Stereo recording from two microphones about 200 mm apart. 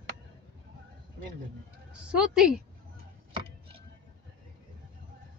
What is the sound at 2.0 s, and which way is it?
Speech, 5° right (ahead or behind).